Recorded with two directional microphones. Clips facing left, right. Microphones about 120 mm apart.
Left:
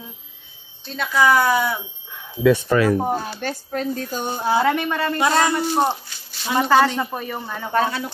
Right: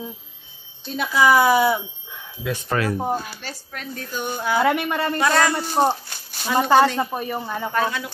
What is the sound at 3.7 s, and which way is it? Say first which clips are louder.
Speech: left 5 dB; 35° left (ahead or behind).